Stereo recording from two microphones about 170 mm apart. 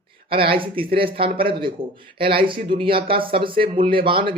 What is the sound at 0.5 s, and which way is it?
Speech, 30° right (ahead or behind).